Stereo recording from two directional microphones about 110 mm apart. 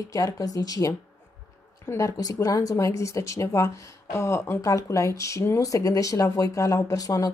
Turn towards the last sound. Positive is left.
turn(degrees=35)  # may be behind; listen again after turning